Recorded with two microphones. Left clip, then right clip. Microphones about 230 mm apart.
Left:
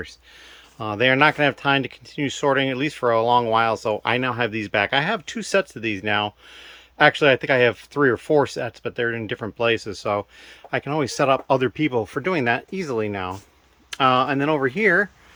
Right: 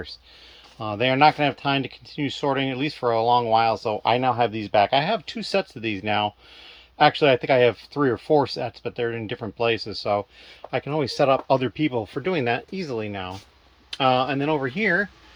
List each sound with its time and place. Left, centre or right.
0.8 s speech: centre